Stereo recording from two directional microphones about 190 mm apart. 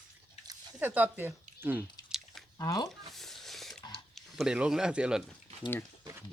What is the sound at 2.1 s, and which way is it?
Chewing, centre (ahead or behind).